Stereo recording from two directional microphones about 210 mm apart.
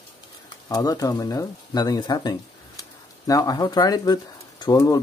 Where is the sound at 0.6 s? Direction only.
15° left (ahead or behind).